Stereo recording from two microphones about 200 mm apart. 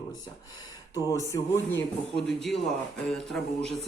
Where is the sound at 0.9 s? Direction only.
15° left (ahead or behind).